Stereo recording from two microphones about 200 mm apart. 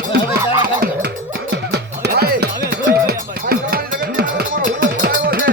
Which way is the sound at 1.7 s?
50° right (ahead or behind).